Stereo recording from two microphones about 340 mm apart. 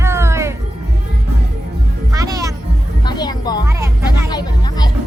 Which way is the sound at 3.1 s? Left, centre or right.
Centre.